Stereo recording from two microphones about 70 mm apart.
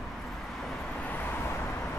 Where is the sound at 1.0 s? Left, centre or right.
Left.